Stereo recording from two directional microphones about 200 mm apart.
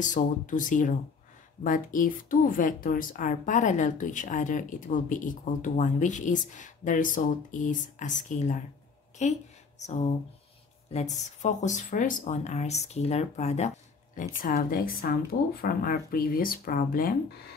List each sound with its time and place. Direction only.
0.0 s speech: 40° left (ahead or behind)
11.1 s speech: 35° left (ahead or behind)